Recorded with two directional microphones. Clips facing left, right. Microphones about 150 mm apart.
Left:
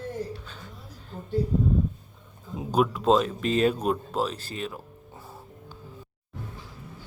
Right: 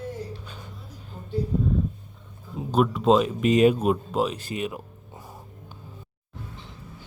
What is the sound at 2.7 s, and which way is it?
Speech, centre (ahead or behind).